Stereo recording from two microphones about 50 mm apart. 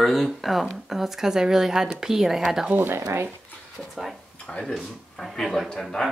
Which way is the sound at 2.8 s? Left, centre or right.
Right.